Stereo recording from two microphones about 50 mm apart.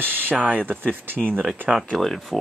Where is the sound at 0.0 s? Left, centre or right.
Right.